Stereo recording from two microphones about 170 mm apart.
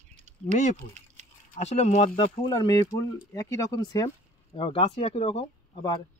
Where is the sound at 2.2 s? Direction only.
30° left (ahead or behind).